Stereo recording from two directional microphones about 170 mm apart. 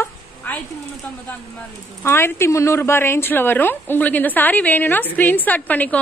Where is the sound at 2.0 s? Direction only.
15° left (ahead or behind).